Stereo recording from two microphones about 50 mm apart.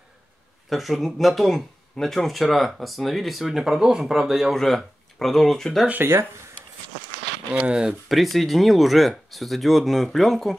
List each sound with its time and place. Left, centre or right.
0.7 s speech: centre
4.6 s speech: centre
5.9 s speech: right
7.5 s speech: right
8.1 s speech: centre